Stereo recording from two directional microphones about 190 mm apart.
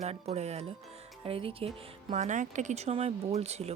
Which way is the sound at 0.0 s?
35° right (ahead or behind).